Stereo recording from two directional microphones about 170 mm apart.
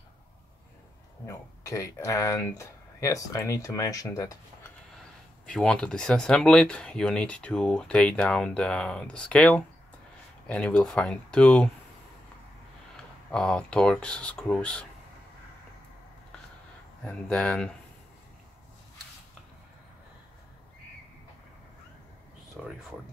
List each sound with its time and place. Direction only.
1.2 s speech: 20° left (ahead or behind)
5.5 s speech: 5° left (ahead or behind)
12.9 s speech: 5° left (ahead or behind)
17.0 s speech: 5° left (ahead or behind)
22.6 s a sound: centre (ahead or behind)